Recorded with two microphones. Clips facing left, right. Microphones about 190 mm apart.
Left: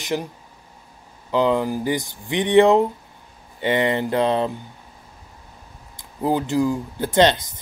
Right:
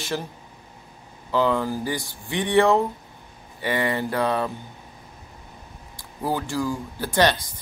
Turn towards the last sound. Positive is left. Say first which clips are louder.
# left 4 dB
turn(degrees=20)  # may be behind; listen again after turning